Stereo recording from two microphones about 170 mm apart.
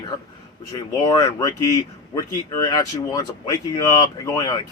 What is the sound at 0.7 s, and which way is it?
Speech, 25° left (ahead or behind).